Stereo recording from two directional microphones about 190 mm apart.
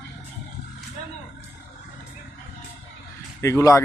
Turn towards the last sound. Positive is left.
turn(degrees=15)  # may be behind; listen again after turning